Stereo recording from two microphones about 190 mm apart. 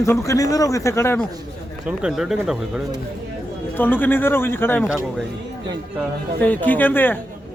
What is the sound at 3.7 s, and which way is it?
Speech, 10° left (ahead or behind).